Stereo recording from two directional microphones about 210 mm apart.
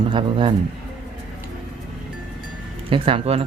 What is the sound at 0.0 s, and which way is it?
Speech, 25° right (ahead or behind).